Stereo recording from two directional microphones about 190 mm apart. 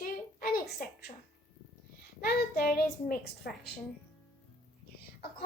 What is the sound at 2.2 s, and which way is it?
A woman's voice, 50° left (ahead or behind).